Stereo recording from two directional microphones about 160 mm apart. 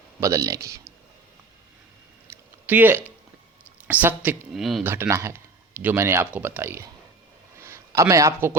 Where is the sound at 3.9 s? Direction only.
10° right (ahead or behind).